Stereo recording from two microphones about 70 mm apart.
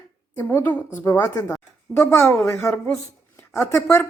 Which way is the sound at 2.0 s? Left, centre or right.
Left.